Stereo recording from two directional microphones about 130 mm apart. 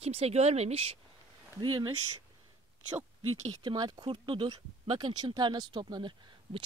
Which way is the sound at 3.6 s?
35° right (ahead or behind).